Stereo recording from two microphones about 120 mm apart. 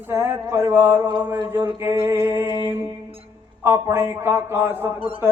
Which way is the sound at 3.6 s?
20° right (ahead or behind).